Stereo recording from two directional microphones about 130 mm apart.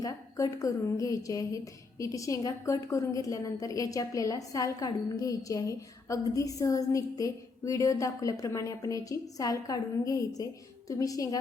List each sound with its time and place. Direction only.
0.0 s a woman's voice: 25° left (ahead or behind)